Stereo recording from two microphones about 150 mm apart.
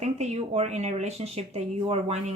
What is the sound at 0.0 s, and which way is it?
Speech, 45° right (ahead or behind).